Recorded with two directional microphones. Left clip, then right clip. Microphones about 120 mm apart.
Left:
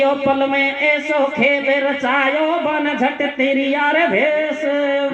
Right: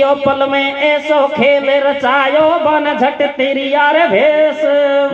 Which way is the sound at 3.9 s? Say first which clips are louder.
Right 3 dB; 35° right (ahead or behind).